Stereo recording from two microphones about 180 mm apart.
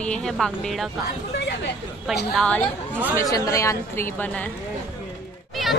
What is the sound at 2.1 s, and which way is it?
Speech, centre (ahead or behind).